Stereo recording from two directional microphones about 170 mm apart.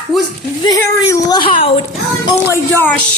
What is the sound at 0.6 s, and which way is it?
Speech, 20° left (ahead or behind).